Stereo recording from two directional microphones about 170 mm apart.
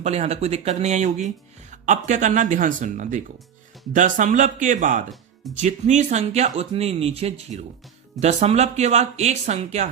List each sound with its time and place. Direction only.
0.0 s speech: 40° right (ahead or behind)